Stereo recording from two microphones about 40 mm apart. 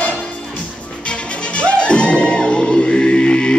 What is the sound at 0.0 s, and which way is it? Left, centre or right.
Music, left.